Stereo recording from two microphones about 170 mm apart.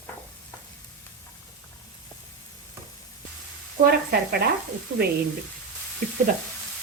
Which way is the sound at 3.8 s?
65° right (ahead or behind).